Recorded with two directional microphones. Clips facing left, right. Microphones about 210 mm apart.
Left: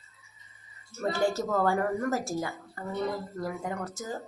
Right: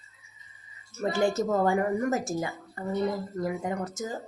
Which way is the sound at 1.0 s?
15° right (ahead or behind).